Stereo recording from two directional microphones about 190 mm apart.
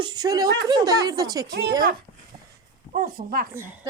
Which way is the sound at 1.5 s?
60° right (ahead or behind).